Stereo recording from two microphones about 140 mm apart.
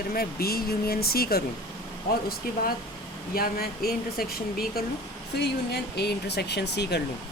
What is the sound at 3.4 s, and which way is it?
Speech, 90° left.